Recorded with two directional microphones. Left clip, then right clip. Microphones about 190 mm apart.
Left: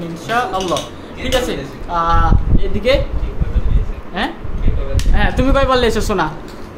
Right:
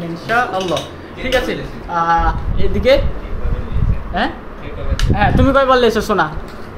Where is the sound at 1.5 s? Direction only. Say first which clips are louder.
Even; 15° left (ahead or behind).